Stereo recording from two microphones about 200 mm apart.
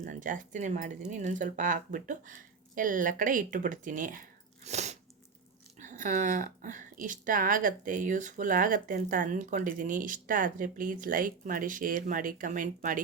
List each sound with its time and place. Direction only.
0.0 s speech: 40° right (ahead or behind)